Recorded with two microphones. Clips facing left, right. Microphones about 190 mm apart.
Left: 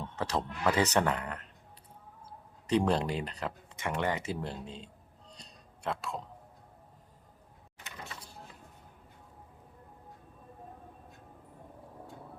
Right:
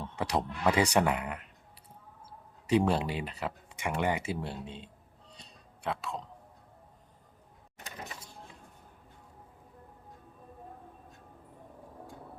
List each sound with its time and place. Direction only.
0.2 s speech: 15° right (ahead or behind)
5.3 s music: centre (ahead or behind)
7.9 s a sound: 20° right (ahead or behind)